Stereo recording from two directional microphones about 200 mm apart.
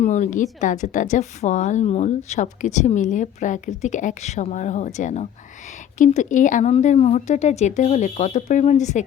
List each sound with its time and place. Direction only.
0.0 s a woman's voice: 35° left (ahead or behind)